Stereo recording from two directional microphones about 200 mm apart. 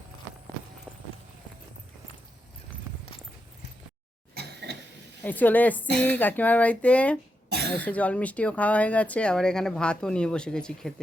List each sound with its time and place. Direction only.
4.4 s mechanisms: 55° right (ahead or behind)
5.2 s speech: 10° left (ahead or behind)